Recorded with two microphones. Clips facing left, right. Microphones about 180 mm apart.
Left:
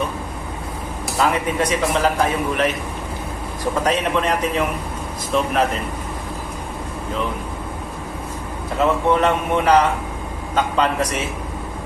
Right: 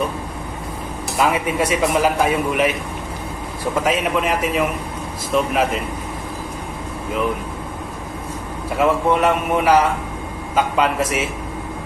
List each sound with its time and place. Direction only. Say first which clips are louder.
1.3 s a man's voice: right 1 dB; 10° right (ahead or behind)
3.8 s a man's voice: even; 5° right (ahead or behind)
8.8 s a man's voice: right 1 dB; 10° right (ahead or behind)